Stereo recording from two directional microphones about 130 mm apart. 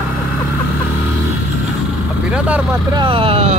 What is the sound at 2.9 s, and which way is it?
Speech, 40° right (ahead or behind).